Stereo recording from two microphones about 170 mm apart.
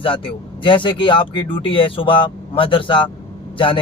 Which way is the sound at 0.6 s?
30° left (ahead or behind).